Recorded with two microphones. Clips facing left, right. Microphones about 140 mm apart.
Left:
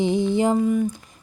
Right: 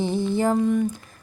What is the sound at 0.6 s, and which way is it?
Speech, 5° left (ahead or behind).